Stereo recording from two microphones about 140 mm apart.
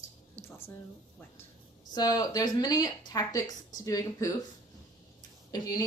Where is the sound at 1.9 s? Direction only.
25° left (ahead or behind).